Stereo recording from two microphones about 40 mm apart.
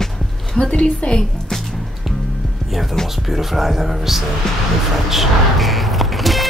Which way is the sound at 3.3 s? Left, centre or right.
Centre.